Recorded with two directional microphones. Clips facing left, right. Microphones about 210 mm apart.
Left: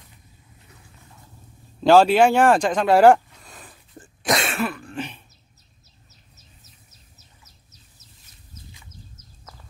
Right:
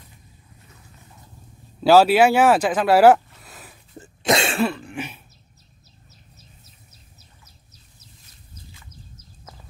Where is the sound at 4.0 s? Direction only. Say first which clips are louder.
Right 3 dB; 25° right (ahead or behind).